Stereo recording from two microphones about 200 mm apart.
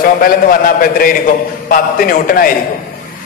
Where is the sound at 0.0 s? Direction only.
45° left (ahead or behind).